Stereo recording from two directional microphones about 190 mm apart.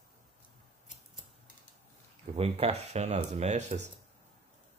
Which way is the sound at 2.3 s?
30° right (ahead or behind).